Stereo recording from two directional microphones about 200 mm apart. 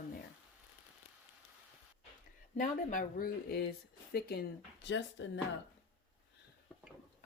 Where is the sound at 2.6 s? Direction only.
45° left (ahead or behind); by 5.2 s 60° left (ahead or behind).